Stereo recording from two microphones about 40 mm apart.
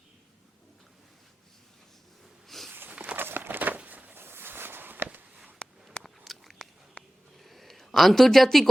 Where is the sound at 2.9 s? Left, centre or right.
Right.